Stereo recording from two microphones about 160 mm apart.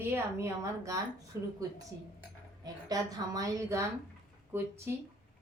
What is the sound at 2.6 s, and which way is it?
A woman's voice, 25° right (ahead or behind).